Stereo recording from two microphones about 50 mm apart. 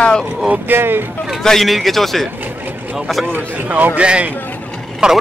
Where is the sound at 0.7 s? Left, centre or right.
Right.